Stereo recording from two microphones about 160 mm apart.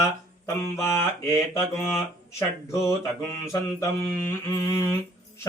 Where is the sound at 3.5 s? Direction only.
15° left (ahead or behind).